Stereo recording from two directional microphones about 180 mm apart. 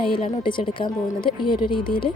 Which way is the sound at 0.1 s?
25° left (ahead or behind).